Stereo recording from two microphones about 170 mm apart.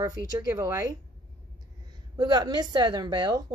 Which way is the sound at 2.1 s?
25° right (ahead or behind).